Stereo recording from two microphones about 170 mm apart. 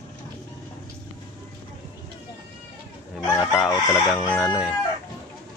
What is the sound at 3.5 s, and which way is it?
Speech, 20° left (ahead or behind).